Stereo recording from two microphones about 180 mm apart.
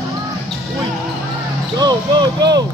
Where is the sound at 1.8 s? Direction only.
20° right (ahead or behind).